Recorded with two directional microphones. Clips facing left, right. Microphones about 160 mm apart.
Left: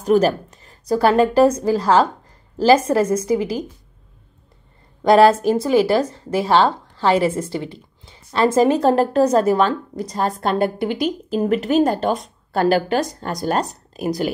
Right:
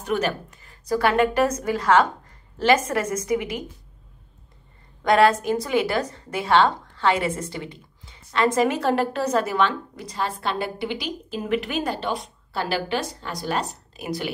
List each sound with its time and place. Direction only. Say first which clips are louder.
0.0 s a woman's voice: left 9 dB; 35° left (ahead or behind)
5.0 s a woman's voice: left 6 dB; 30° left (ahead or behind)